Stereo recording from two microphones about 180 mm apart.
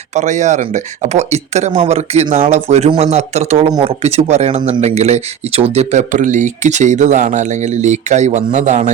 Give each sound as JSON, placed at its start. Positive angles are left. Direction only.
{"t": 0.1, "sound": "speech", "side_deg": -40}